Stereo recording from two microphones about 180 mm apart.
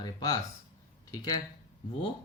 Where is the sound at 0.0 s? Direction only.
20° left (ahead or behind).